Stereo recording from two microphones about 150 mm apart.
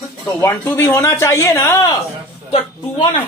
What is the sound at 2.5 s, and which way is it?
Speech, 35° left (ahead or behind).